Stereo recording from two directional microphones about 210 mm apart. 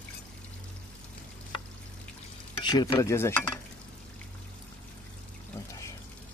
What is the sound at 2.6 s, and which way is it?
Stir, 20° left (ahead or behind).